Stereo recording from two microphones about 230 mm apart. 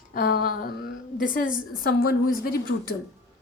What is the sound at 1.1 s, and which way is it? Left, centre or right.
A woman's voice, left.